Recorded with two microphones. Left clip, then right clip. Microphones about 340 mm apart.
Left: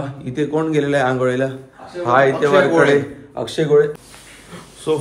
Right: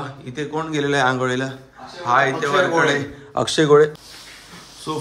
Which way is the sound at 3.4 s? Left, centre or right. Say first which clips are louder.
Right 1 dB; centre.